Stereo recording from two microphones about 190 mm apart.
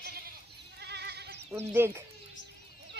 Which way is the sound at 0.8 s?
60° right (ahead or behind).